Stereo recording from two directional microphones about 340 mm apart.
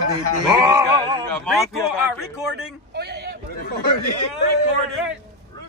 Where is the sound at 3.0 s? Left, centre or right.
Right.